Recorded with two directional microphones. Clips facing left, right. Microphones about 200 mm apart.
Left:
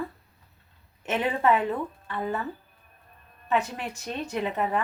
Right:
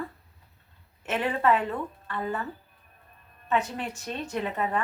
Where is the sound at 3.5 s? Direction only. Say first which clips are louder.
Left 1 dB; 15° left (ahead or behind).